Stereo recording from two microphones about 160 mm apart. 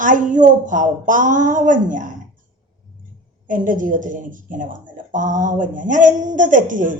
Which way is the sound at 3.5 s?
55° right (ahead or behind).